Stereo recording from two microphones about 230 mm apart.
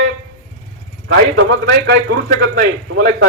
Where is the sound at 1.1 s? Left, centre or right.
Right.